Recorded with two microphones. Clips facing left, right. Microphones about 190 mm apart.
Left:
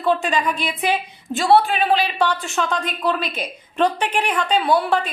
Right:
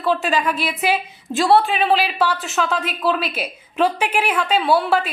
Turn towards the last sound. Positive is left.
turn(degrees=-5)  # may be behind; listen again after turning